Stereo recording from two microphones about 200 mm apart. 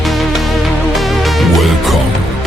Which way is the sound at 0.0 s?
Centre (ahead or behind).